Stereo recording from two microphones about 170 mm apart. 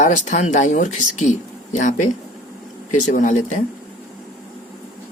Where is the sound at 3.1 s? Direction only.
45° left (ahead or behind).